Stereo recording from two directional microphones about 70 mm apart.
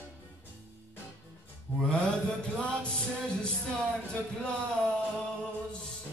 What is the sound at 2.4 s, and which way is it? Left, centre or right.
Music, centre.